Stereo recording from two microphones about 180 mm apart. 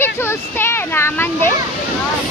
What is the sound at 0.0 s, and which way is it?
Speech, 15° left (ahead or behind).